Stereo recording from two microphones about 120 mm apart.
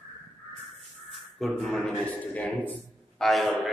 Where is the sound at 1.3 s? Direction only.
Centre (ahead or behind).